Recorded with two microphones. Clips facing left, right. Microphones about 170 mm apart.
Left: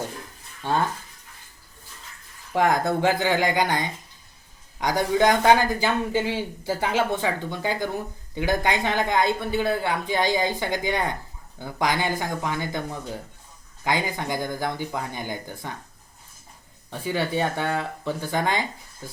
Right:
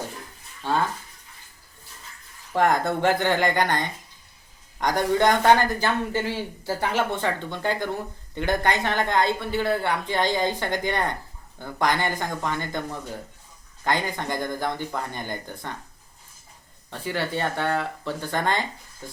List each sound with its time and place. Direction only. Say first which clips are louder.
0.6 s speech: even; 15° left (ahead or behind)
2.5 s speech: even; 10° left (ahead or behind)
16.9 s speech: left 2 dB; 15° left (ahead or behind)